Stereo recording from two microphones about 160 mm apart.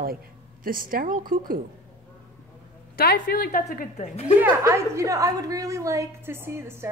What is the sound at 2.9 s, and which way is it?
Speech, 70° left (ahead or behind).